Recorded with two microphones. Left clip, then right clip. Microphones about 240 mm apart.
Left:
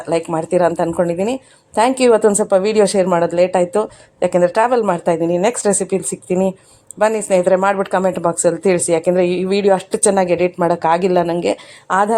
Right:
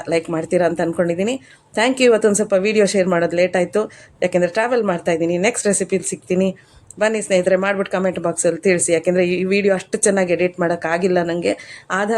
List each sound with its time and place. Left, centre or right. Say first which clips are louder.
0.0 s a woman's voice: left 2 dB; centre